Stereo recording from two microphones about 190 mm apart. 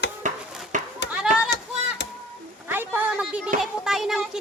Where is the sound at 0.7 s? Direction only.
40° right (ahead or behind).